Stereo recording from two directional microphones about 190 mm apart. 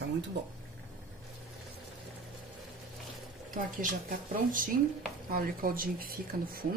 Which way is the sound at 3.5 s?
45° right (ahead or behind).